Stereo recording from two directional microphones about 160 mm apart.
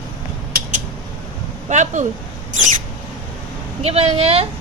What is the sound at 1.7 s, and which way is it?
Speech, 50° right (ahead or behind).